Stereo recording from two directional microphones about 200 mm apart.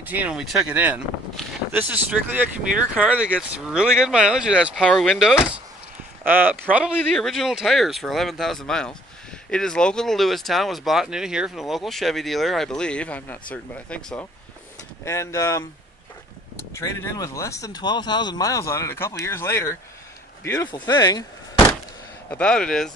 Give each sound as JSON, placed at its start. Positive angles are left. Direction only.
{"t": 0.0, "sound": "speech", "side_deg": -10}
{"t": 7.0, "sound": "speech", "side_deg": 0}
{"t": 16.7, "sound": "speech", "side_deg": 15}
{"t": 22.3, "sound": "speech", "side_deg": 5}